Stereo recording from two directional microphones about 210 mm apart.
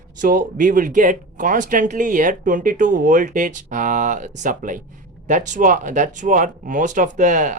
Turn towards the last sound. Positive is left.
turn(degrees=-35)  # may be behind; listen again after turning